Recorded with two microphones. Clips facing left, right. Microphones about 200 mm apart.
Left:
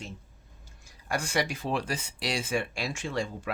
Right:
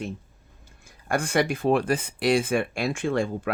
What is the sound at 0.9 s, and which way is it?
Speech, 55° right (ahead or behind).